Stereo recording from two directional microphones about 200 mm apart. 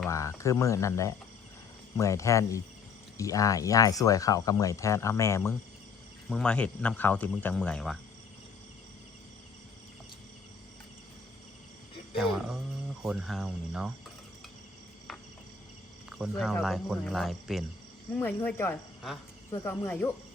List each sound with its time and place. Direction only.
0.1 s speech: 15° left (ahead or behind)
6.2 s speech: 5° left (ahead or behind)
12.1 s speech: centre (ahead or behind)
16.0 s speech: 5° right (ahead or behind)